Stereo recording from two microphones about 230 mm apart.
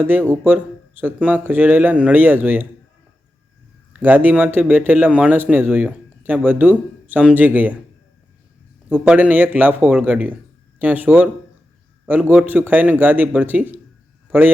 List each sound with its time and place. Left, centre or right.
0.0 s a man's voice: centre
3.9 s a man's voice: centre
8.9 s a man's voice: centre